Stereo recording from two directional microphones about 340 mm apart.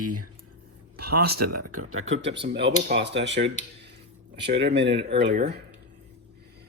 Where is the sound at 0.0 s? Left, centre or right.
Right.